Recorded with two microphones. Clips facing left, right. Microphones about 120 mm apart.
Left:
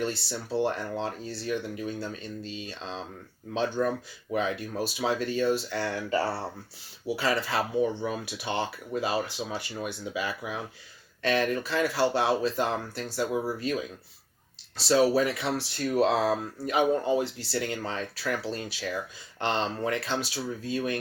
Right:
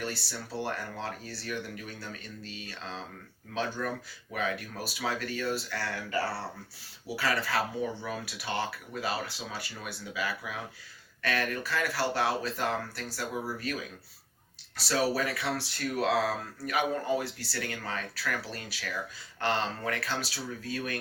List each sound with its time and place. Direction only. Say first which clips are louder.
0.0 s speech: left 5 dB; 20° left (ahead or behind)
14.8 s speech: left 6 dB; 25° left (ahead or behind)